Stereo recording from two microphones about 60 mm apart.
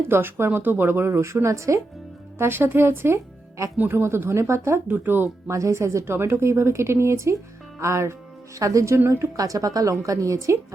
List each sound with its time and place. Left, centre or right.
0.1 s speech: right
2.4 s speech: right
4.9 s speech: right
5.5 s speech: right
8.5 s speech: right
9.3 s a woman's voice: right